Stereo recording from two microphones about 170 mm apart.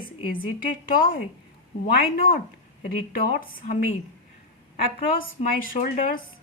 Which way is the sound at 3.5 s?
55° left (ahead or behind).